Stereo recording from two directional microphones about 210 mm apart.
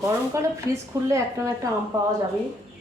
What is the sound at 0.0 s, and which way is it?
Speech, 15° right (ahead or behind).